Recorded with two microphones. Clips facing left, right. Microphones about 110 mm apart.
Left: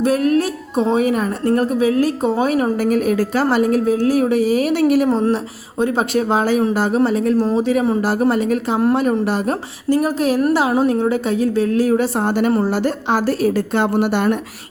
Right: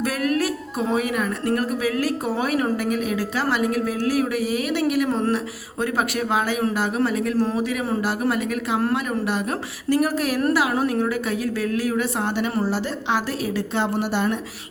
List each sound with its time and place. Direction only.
0.0 s a woman's voice: 25° left (ahead or behind)
9.9 s a woman's voice: 25° left (ahead or behind); by 14.3 s 60° left (ahead or behind)